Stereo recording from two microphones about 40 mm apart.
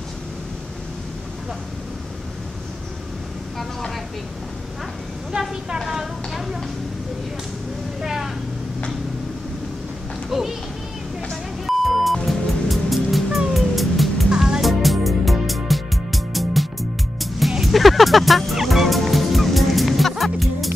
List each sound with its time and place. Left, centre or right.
3.5 s speech: centre
8.0 s vehicle: centre
10.3 s speech: centre
11.6 s music: centre